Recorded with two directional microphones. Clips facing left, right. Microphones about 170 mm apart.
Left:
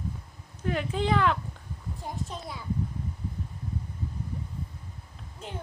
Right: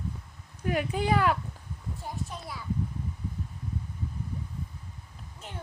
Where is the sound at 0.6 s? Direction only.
10° right (ahead or behind).